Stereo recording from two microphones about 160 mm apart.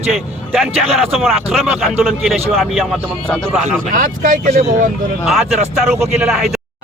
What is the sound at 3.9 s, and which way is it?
Speech, 60° right (ahead or behind).